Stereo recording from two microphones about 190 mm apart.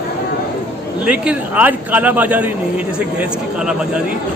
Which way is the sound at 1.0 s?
5° right (ahead or behind).